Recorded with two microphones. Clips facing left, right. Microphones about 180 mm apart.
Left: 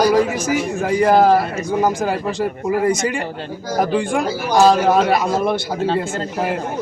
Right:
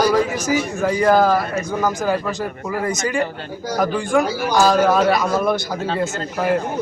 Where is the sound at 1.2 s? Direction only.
25° left (ahead or behind).